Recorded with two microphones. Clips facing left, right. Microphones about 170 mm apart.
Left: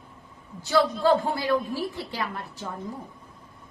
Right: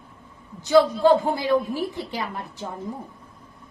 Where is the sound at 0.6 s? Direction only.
15° right (ahead or behind).